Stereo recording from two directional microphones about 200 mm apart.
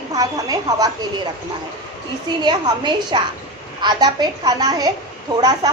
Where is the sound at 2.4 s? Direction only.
20° right (ahead or behind).